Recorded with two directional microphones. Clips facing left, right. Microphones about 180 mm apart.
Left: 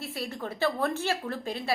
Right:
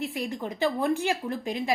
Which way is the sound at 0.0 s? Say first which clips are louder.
Right 4 dB; 15° right (ahead or behind).